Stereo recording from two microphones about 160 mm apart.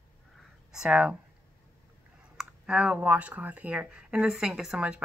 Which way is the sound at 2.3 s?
5° right (ahead or behind).